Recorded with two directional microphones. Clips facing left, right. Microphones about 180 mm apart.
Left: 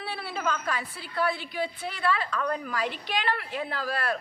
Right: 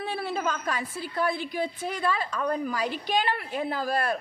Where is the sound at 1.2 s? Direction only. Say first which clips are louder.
Right 1 dB; 45° right (ahead or behind).